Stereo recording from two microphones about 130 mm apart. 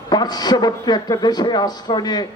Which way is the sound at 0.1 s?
30° left (ahead or behind).